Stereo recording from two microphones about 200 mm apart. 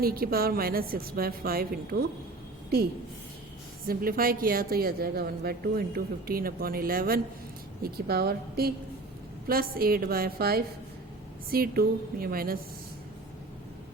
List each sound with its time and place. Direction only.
0.0 s a woman's voice: 50° right (ahead or behind)
3.8 s a woman's voice: 45° right (ahead or behind)